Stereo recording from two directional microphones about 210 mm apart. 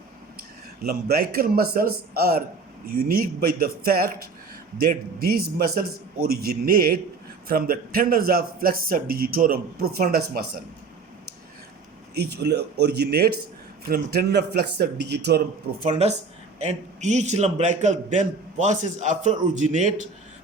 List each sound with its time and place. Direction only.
0.9 s speech: 45° right (ahead or behind)
12.1 s speech: 50° right (ahead or behind)
15.8 s a man's voice: 35° right (ahead or behind)